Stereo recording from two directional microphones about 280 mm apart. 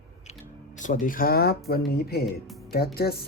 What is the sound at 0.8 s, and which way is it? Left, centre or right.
Speech, left.